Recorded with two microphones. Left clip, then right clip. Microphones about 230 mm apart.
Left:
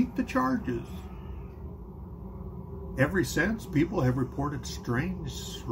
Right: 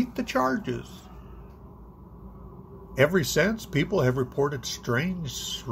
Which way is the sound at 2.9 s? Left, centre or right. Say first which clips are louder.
Right 5 dB; right.